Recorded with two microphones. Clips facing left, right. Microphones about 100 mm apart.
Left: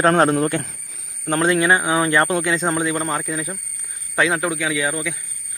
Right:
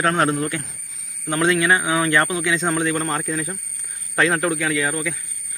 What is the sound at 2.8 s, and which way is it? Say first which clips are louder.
A man's voice: even; 5° left (ahead or behind).